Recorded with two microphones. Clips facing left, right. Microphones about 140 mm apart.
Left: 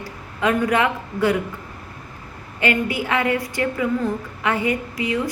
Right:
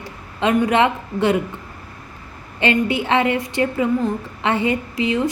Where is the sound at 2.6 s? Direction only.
25° right (ahead or behind).